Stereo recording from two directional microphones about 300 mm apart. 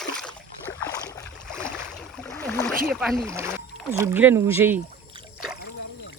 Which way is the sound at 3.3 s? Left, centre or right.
Centre.